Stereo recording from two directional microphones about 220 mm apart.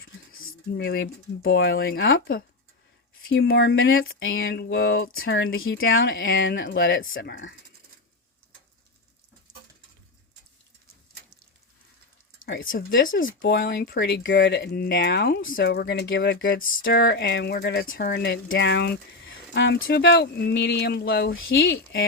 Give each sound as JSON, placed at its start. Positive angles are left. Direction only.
{"t": 0.9, "sound": "speech", "side_deg": 50}
{"t": 3.2, "sound": "speech", "side_deg": 50}
{"t": 3.8, "sound": "speech", "side_deg": 65}
{"t": 4.4, "sound": "speech", "side_deg": 45}
{"t": 5.3, "sound": "speech", "side_deg": 65}
{"t": 12.5, "sound": "speech", "side_deg": 45}
{"t": 13.4, "sound": "speech", "side_deg": 55}
{"t": 18.0, "sound": "speech", "side_deg": 45}
{"t": 21.5, "sound": "speech", "side_deg": 55}